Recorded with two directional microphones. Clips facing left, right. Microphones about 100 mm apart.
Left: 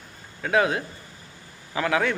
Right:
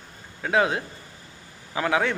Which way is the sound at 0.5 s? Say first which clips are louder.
Even; 25° right (ahead or behind).